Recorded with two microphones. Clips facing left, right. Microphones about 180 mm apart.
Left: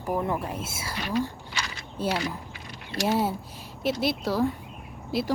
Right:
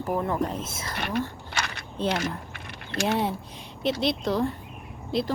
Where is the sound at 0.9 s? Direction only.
60° right (ahead or behind).